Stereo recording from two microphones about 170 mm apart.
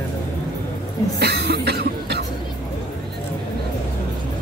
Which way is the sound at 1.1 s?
70° right (ahead or behind).